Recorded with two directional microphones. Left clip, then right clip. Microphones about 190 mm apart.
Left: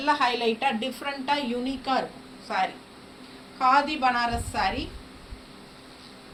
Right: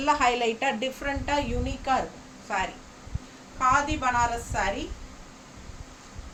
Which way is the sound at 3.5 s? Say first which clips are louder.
Left 2 dB; 20° right (ahead or behind).